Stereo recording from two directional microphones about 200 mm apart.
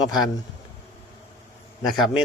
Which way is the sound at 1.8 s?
Centre (ahead or behind).